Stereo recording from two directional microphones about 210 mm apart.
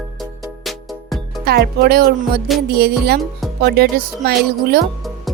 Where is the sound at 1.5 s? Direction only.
50° right (ahead or behind).